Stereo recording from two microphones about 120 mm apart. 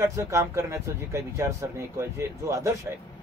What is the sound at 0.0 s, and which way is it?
Speech, 25° right (ahead or behind).